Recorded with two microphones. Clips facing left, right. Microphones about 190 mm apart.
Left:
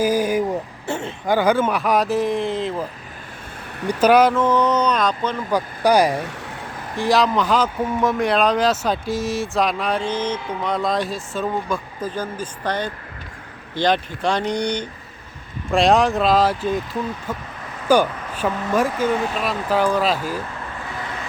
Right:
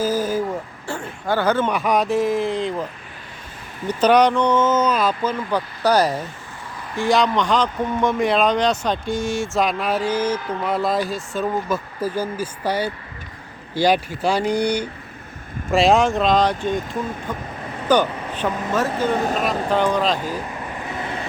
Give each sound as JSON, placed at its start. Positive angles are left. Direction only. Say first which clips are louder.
{"t": 0.0, "sound": "a sound", "louder": "left 2 dB", "side_deg": 15}
{"t": 0.9, "sound": "speech", "louder": "left 2 dB", "side_deg": 25}
{"t": 3.8, "sound": "speech", "louder": "left 1 dB", "side_deg": 5}
{"t": 5.5, "sound": "speech", "louder": "left 3 dB", "side_deg": 10}
{"t": 6.9, "sound": "speech", "louder": "even", "side_deg": 0}
{"t": 19.2, "sound": "speech", "louder": "right 2 dB", "side_deg": -40}
{"t": 19.5, "sound": "speech", "louder": "left 2 dB", "side_deg": 5}